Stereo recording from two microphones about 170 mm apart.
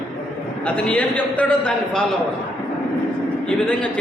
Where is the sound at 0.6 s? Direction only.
5° left (ahead or behind).